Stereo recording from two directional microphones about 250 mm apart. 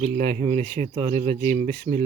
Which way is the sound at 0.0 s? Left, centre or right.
Right.